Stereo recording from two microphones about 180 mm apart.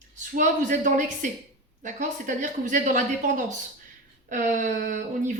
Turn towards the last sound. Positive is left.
turn(degrees=-45)  # may be behind; listen again after turning